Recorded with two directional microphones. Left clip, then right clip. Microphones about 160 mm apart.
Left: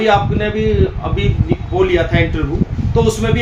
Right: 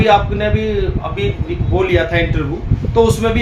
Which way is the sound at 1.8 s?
15° right (ahead or behind).